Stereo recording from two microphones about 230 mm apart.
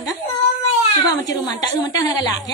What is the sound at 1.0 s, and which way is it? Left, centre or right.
A woman's voice, centre.